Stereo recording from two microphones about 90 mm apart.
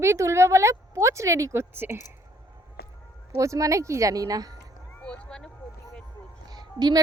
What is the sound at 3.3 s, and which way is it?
A woman's voice, 35° right (ahead or behind).